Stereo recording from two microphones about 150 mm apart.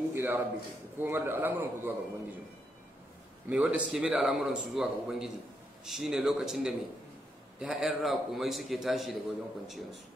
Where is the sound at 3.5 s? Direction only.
10° right (ahead or behind).